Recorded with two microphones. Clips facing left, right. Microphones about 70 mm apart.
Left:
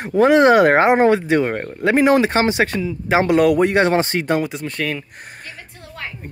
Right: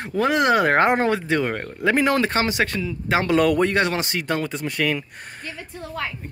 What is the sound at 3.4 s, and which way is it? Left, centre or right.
Speech, centre.